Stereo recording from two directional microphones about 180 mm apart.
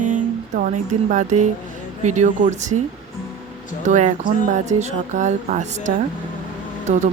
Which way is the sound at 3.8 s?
45° right (ahead or behind).